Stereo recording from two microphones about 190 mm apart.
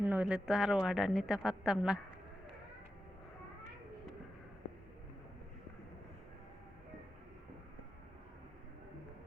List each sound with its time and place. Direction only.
0.0 s speech: 5° right (ahead or behind)